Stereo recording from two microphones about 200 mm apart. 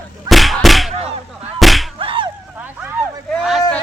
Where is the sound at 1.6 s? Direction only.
Centre (ahead or behind).